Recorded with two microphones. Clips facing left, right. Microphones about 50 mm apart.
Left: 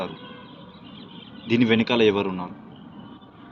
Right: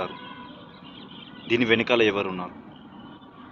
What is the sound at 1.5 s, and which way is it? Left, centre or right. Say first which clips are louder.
Speech: left 1 dB; right.